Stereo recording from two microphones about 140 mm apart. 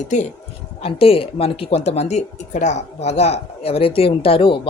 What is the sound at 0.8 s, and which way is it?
Speech, 45° left (ahead or behind).